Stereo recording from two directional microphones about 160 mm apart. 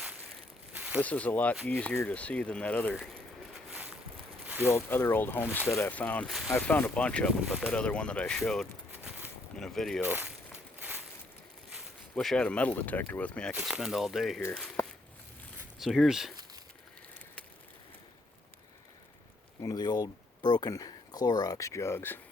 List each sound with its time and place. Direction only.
0.0 s a sound: 10° right (ahead or behind)
1.0 s speech: 10° left (ahead or behind)
3.7 s boat: 10° right (ahead or behind)
4.6 s speech: 15° left (ahead or behind)
8.9 s a sound: 10° right (ahead or behind)
9.6 s speech: 5° left (ahead or behind)
10.0 s walk: 10° right (ahead or behind)
12.1 s speech: 5° left (ahead or behind)
13.6 s speech: 5° right (ahead or behind)
14.8 s a sound: 20° left (ahead or behind)
15.8 s speech: centre (ahead or behind)
19.6 s speech: 25° left (ahead or behind)